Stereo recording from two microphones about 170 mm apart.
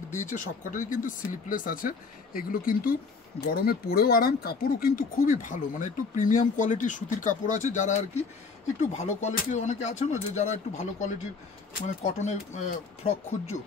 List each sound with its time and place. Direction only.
0.1 s speech: 45° left (ahead or behind)
12.2 s speech: 45° left (ahead or behind)